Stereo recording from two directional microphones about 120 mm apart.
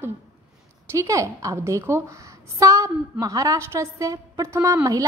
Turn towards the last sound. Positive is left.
turn(degrees=-25)  # may be behind; listen again after turning